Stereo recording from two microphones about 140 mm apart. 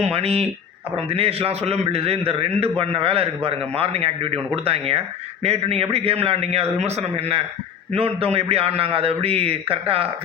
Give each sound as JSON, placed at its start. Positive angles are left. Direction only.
{"t": 0.0, "sound": "a man's voice", "side_deg": -45}